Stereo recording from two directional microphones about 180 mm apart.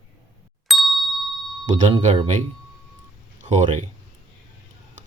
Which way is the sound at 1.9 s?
40° right (ahead or behind).